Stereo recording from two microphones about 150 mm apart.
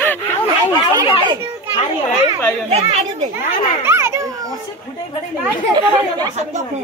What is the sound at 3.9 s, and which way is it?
Children playing, 20° right (ahead or behind).